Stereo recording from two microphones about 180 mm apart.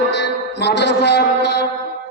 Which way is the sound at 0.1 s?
70° left (ahead or behind).